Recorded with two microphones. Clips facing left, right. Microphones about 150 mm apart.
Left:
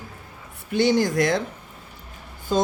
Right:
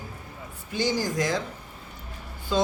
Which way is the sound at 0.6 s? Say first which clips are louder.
Left 7 dB; 65° left (ahead or behind).